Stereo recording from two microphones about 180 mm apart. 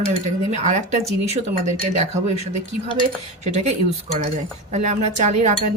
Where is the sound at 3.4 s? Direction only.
40° right (ahead or behind).